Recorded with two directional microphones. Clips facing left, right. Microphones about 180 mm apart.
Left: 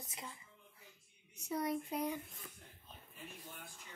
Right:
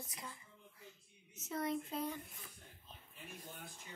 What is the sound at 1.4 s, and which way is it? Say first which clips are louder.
Speech: left 1 dB; 15° left (ahead or behind).